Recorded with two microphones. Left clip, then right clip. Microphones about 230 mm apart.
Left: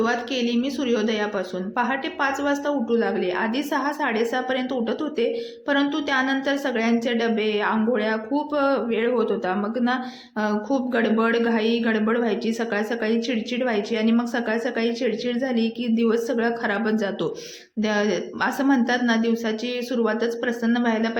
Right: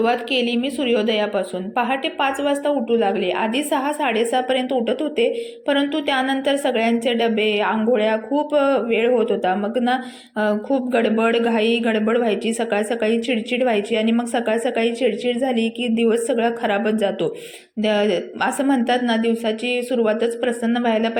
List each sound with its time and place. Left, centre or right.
0.0 s a woman's voice: centre
15.5 s a woman's voice: left
16.0 s a woman's voice: centre